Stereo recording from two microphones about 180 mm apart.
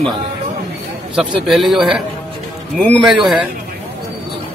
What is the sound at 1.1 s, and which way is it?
Speech, centre (ahead or behind).